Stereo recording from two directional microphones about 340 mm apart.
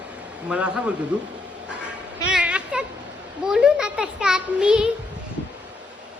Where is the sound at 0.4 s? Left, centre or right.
Centre.